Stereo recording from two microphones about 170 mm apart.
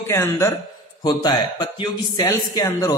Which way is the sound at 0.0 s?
15° left (ahead or behind).